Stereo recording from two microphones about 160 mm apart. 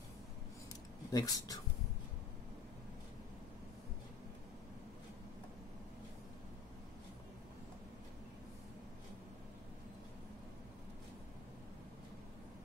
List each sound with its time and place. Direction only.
1.1 s speech: 20° left (ahead or behind)